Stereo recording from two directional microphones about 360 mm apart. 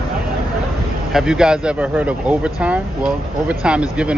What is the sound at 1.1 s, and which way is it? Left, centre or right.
Speech, centre.